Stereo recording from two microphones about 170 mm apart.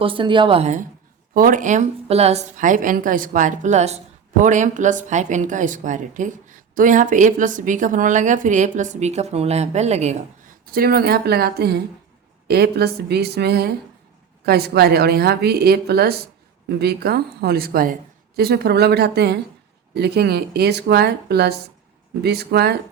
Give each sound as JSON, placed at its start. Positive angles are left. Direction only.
{"t": 0.0, "sound": "speech", "side_deg": -30}
{"t": 1.3, "sound": "a woman's voice", "side_deg": -55}
{"t": 10.7, "sound": "a woman's voice", "side_deg": -60}
{"t": 18.3, "sound": "a woman's voice", "side_deg": -70}